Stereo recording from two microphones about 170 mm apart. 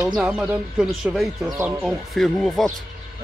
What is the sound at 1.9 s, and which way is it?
Speech, centre (ahead or behind).